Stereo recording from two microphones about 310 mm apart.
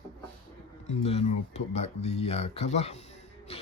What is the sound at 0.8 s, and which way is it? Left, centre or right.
Speech, centre.